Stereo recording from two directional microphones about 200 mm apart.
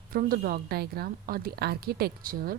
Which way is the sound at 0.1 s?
45° right (ahead or behind).